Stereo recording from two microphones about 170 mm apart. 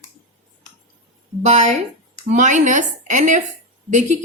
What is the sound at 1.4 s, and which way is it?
A woman's voice, 40° right (ahead or behind).